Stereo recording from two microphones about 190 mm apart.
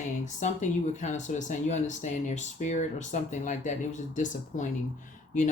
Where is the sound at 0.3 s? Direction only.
40° left (ahead or behind).